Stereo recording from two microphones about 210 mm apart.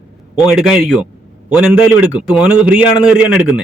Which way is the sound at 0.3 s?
5° right (ahead or behind).